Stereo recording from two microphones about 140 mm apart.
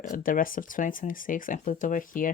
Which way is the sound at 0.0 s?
75° left (ahead or behind).